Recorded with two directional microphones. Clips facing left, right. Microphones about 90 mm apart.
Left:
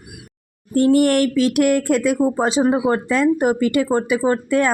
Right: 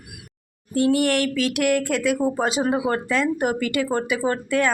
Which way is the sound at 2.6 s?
20° left (ahead or behind).